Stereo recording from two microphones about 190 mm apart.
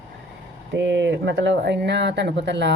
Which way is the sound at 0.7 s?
70° right (ahead or behind).